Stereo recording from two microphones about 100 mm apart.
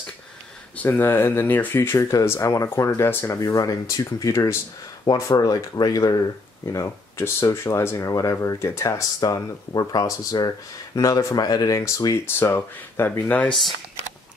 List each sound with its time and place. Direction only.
0.7 s speech: 20° left (ahead or behind)
3.3 s speech: 35° left (ahead or behind); by 13.5 s 20° left (ahead or behind)